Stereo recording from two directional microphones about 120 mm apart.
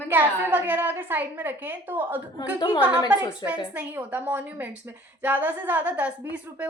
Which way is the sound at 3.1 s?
10° right (ahead or behind).